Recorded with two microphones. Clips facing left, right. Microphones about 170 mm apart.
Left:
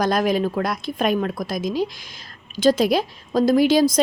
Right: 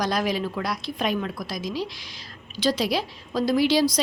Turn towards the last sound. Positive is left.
turn(degrees=50)  # may be behind; listen again after turning